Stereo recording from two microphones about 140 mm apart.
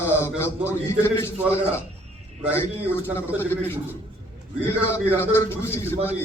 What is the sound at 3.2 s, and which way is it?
Speech, 15° left (ahead or behind).